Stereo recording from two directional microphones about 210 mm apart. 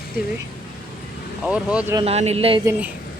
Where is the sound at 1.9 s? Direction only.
30° right (ahead or behind).